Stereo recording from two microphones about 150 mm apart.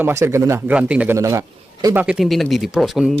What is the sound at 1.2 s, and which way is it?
Speech, 20° right (ahead or behind).